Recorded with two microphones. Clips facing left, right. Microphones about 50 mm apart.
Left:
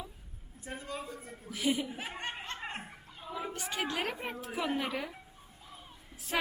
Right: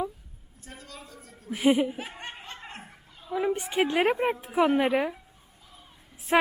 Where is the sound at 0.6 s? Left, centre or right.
Centre.